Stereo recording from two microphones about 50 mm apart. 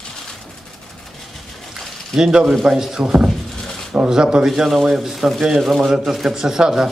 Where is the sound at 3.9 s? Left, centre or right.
Centre.